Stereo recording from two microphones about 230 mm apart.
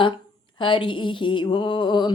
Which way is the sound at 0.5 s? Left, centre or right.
Left.